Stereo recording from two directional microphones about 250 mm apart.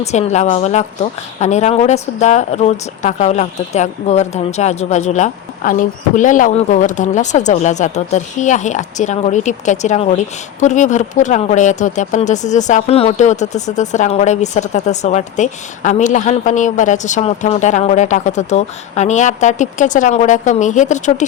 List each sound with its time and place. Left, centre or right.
0.0 s speech: left